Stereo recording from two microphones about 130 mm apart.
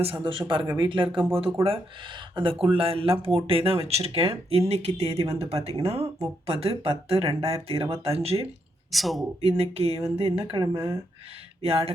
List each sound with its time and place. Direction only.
0.0 s speech: 40° right (ahead or behind)
8.9 s speech: centre (ahead or behind)
9.4 s speech: 55° right (ahead or behind)
10.6 s speech: 25° right (ahead or behind)
11.6 s speech: 50° right (ahead or behind)